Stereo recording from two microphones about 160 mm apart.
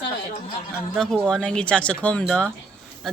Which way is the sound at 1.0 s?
5° left (ahead or behind).